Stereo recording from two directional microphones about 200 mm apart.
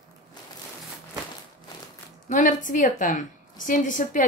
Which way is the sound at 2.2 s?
40° left (ahead or behind).